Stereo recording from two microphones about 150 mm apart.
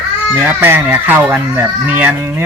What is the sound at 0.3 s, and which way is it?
Speech, 15° right (ahead or behind).